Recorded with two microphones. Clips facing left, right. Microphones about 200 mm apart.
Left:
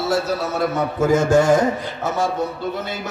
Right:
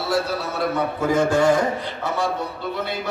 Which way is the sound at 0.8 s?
45° left (ahead or behind).